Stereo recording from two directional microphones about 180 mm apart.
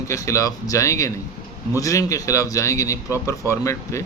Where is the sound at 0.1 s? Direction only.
15° left (ahead or behind).